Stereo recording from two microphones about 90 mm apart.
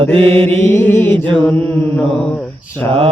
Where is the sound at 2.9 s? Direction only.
90° right.